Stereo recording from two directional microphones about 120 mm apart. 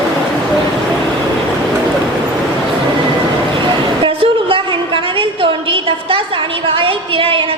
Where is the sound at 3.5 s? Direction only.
45° right (ahead or behind).